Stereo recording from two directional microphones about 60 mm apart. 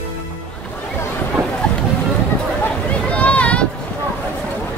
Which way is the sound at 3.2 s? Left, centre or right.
Left.